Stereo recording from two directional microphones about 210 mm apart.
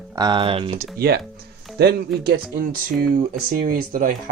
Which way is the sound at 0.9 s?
50° right (ahead or behind).